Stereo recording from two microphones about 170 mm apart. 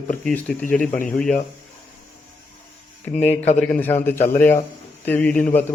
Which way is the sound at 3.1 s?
40° left (ahead or behind).